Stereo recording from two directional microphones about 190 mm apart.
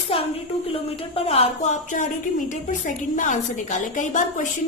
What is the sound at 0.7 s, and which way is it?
A woman's voice, 30° left (ahead or behind).